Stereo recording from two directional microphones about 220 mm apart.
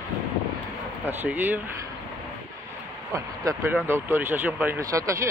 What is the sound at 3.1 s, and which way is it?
Speech, 10° right (ahead or behind).